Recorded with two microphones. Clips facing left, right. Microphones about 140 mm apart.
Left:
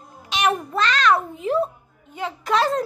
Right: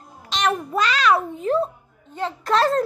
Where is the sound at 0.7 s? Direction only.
10° right (ahead or behind).